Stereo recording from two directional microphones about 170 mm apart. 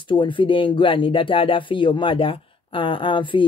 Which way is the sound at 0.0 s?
30° left (ahead or behind).